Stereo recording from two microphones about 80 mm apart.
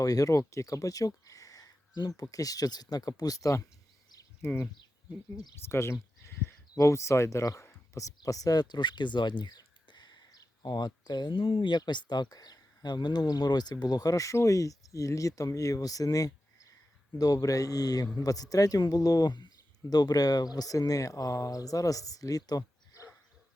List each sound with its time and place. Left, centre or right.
0.0 s speech: left
4.4 s speech: left
11.8 s speech: left